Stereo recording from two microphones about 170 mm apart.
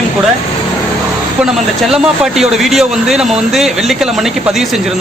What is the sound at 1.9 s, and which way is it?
Speech, centre (ahead or behind).